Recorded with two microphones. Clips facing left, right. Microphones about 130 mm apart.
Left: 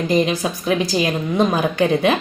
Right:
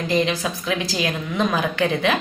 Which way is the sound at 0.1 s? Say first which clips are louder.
Left 2 dB; 25° left (ahead or behind).